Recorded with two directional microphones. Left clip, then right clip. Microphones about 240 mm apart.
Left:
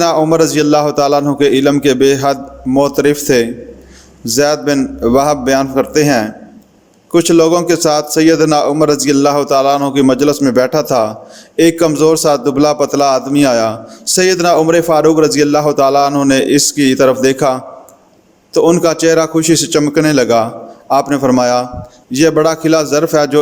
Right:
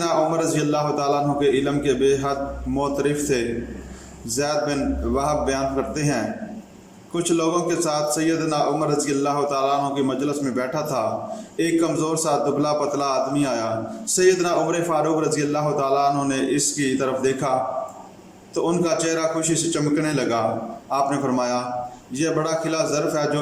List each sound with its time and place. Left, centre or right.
0.0 s a man's voice: left